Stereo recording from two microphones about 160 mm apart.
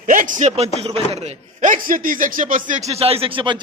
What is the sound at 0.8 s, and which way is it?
Speech, 40° right (ahead or behind).